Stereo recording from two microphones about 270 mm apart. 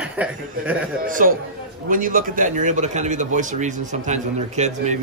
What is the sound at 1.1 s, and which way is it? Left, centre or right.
A man's voice, right.